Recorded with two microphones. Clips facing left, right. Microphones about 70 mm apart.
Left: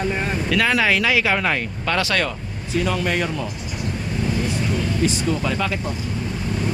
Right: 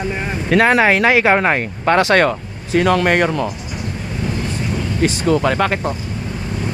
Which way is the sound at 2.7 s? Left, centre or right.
Right.